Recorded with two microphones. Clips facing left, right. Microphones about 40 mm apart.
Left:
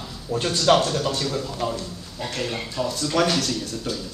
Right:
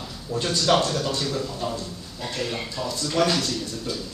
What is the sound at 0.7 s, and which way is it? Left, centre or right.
Speech, left.